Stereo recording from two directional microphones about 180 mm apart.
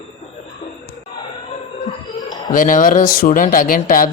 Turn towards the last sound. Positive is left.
turn(degrees=50)  # may be behind; listen again after turning